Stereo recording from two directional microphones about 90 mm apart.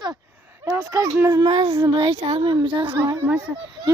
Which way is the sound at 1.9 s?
90° right.